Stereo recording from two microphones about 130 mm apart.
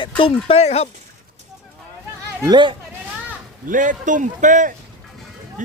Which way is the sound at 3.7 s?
80° right.